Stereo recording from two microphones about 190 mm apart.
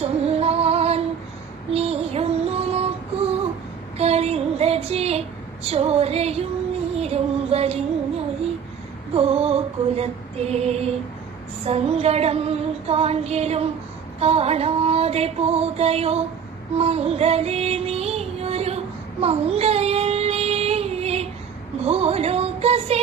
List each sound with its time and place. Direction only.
0.0 s music: 30° right (ahead or behind)
1.7 s child singing: 30° right (ahead or behind)
3.9 s a sound: 35° right (ahead or behind)
5.6 s female singing: 30° right (ahead or behind)
9.1 s female singing: 30° right (ahead or behind)
16.7 s music: 30° right (ahead or behind)
19.2 s child singing: 30° right (ahead or behind)
21.8 s music: 30° right (ahead or behind)